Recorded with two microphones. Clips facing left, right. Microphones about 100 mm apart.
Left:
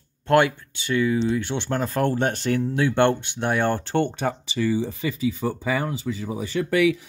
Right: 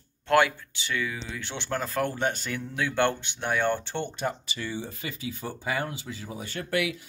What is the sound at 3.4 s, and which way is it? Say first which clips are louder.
Speech: left 2 dB; 45° left (ahead or behind).